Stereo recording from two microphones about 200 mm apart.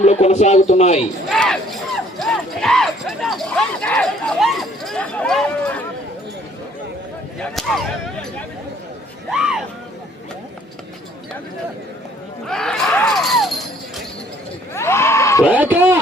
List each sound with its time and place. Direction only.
0.0 s a man's voice: 35° left (ahead or behind)
1.3 s speech: centre (ahead or behind)
7.3 s speech: 5° left (ahead or behind)
12.5 s a sound: 5° left (ahead or behind)
14.7 s a sound: 15° left (ahead or behind)
15.4 s speech: 10° right (ahead or behind)